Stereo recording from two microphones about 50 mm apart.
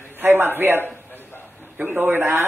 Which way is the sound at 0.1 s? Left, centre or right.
Right.